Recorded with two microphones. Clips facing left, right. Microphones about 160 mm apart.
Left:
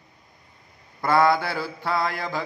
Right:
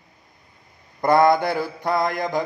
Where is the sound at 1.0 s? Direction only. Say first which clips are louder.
Right 4 dB; 20° right (ahead or behind).